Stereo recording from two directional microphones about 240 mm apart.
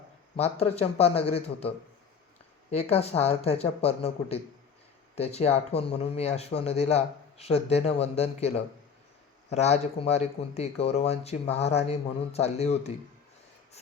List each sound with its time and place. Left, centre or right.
0.3 s speech: left
2.9 s speech: left